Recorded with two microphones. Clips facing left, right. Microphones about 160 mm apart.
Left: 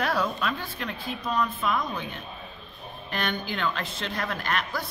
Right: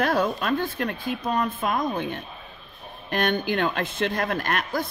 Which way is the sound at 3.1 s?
50° right (ahead or behind).